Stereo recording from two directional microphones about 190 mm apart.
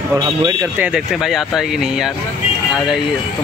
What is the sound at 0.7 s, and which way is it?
Speech, 5° right (ahead or behind).